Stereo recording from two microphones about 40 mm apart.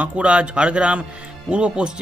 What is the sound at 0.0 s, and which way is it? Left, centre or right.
Speech, right.